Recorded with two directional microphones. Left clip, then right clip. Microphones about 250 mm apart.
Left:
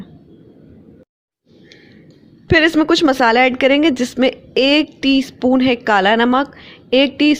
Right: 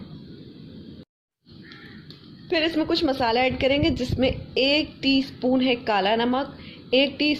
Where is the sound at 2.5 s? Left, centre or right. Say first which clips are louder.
Left 10 dB; left.